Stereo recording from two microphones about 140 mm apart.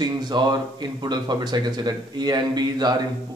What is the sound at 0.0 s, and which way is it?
Speech, 30° right (ahead or behind).